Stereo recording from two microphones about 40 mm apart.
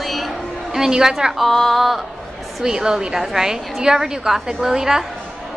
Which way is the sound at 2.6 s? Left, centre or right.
Centre.